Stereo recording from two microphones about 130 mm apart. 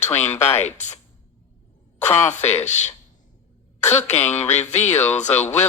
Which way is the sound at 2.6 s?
60° left (ahead or behind).